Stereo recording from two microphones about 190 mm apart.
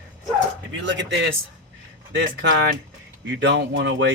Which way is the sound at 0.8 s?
70° right (ahead or behind).